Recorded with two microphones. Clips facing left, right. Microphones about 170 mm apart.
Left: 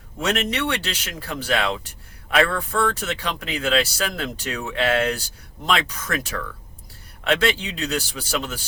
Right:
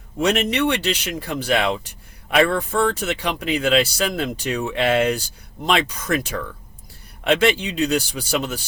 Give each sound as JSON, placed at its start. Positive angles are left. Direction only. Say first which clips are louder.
{"t": 0.2, "sound": "speech", "louder": "right 4 dB", "side_deg": -15}